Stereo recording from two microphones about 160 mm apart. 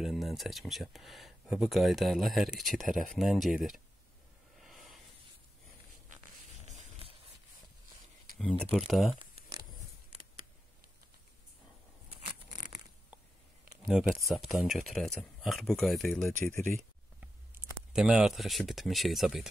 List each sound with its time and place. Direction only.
0.0 s speech: centre (ahead or behind)
4.6 s a sound: centre (ahead or behind)
6.6 s a sound: 45° right (ahead or behind)
8.4 s speech: 5° left (ahead or behind)
13.8 s speech: centre (ahead or behind)
17.2 s speech: 10° right (ahead or behind)